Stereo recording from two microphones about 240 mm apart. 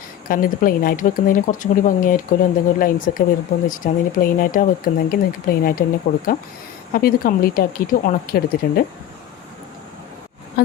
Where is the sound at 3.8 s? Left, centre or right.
Left.